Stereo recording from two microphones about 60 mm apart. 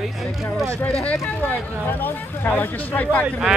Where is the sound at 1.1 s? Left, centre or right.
Left.